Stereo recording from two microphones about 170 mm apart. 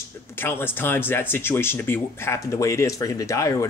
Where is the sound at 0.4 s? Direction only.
15° left (ahead or behind).